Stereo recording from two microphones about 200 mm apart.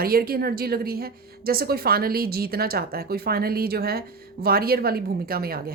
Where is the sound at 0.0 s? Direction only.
50° right (ahead or behind).